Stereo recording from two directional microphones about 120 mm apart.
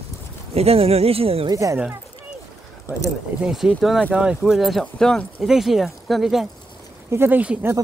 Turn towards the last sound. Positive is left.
turn(degrees=-15)  # may be behind; listen again after turning